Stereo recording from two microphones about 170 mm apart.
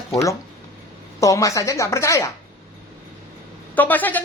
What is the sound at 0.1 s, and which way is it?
Speech, 20° left (ahead or behind).